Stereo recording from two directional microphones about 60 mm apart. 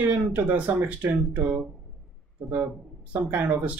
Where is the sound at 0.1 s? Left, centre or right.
Right.